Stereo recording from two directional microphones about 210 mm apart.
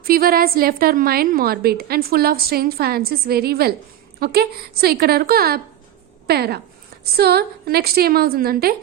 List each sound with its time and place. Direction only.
0.0 s a woman's voice: 45° right (ahead or behind)